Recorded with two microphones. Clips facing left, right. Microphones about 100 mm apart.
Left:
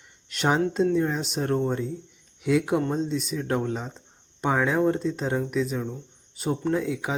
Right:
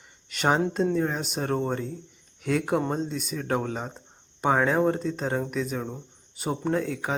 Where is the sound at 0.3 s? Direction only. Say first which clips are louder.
Even; centre (ahead or behind).